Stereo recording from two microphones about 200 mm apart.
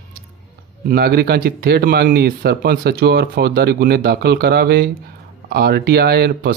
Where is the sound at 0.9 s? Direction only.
50° right (ahead or behind).